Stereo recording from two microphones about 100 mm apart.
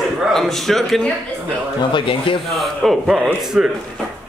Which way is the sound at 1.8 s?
55° left (ahead or behind).